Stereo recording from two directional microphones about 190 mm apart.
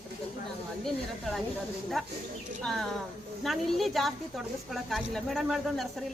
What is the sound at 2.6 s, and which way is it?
Speech, centre (ahead or behind).